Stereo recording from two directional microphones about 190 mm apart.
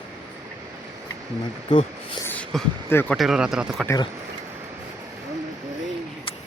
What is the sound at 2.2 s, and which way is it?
Speech, 10° left (ahead or behind).